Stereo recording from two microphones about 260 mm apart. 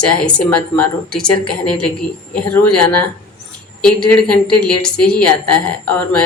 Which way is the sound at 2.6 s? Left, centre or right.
Left.